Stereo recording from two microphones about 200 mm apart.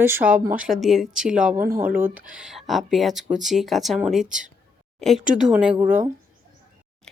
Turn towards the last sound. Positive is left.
turn(degrees=-10)  # may be behind; listen again after turning